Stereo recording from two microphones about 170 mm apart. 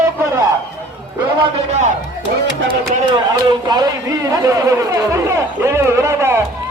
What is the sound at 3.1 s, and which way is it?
A man's voice, 25° right (ahead or behind).